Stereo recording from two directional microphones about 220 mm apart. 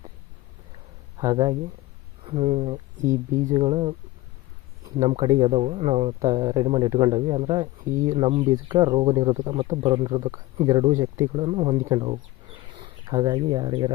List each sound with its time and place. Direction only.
1.2 s speech: 20° right (ahead or behind)
3.1 s speech: 15° right (ahead or behind)
4.9 s speech: 20° right (ahead or behind)
6.1 s speech: 20° right (ahead or behind)
7.9 s speech: 10° right (ahead or behind)
8.2 s speech: 25° right (ahead or behind)